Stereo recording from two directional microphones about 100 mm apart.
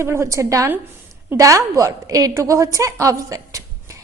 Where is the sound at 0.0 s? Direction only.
25° right (ahead or behind).